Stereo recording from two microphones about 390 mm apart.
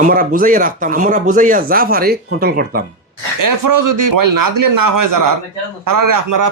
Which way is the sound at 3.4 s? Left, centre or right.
Right.